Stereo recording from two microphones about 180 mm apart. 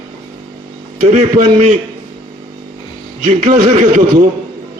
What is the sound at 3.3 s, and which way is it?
A man's voice, 45° right (ahead or behind).